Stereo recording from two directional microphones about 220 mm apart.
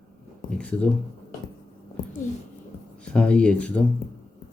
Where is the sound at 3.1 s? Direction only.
5° left (ahead or behind).